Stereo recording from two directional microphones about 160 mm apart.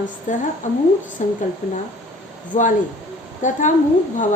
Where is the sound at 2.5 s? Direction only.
50° left (ahead or behind).